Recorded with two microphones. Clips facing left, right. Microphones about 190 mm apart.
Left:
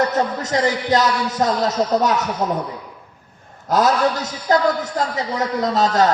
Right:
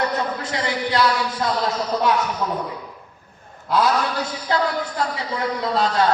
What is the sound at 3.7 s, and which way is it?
A man's voice, 45° left (ahead or behind).